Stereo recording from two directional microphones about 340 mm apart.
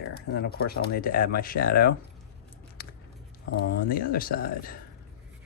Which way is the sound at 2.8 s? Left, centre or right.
Left.